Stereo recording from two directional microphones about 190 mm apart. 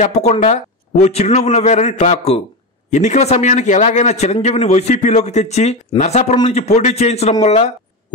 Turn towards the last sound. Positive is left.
turn(degrees=35)  # may be behind; listen again after turning